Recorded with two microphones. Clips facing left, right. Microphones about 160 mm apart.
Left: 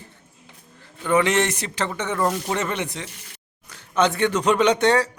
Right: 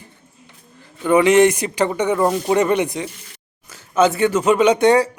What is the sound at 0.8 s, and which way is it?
A man's voice, 15° right (ahead or behind).